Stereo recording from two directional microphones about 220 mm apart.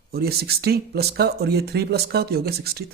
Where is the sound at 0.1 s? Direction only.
45° right (ahead or behind).